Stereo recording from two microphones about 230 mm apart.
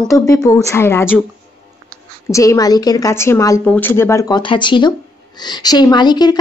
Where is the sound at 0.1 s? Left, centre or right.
Centre.